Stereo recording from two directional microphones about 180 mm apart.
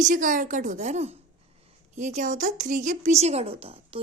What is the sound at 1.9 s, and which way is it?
A woman's voice, 40° right (ahead or behind).